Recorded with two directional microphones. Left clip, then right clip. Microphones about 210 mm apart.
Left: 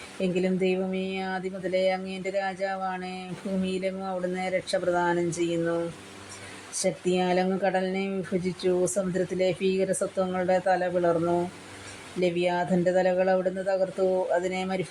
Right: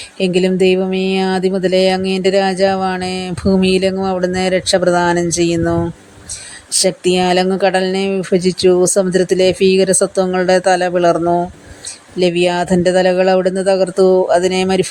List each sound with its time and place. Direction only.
0.2 s speech: 45° right (ahead or behind)